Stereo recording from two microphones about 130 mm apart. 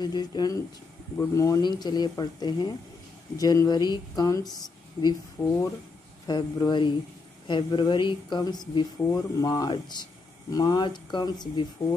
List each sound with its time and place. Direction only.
0.0 s speech: 35° left (ahead or behind)
11.8 s speech: 45° left (ahead or behind)